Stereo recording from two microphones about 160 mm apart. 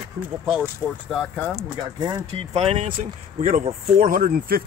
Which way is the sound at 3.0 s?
55° right (ahead or behind).